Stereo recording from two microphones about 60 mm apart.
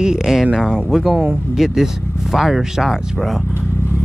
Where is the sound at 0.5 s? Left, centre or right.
Centre.